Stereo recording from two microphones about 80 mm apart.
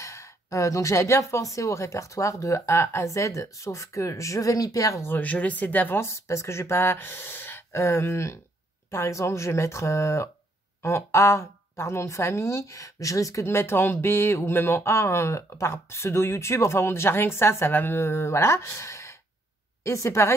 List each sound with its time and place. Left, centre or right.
0.0 s a woman's voice: left
5.0 s speech: left
5.9 s a woman's voice: left